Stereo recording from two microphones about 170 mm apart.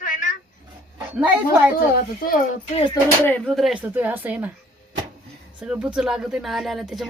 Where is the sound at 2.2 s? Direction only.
55° left (ahead or behind).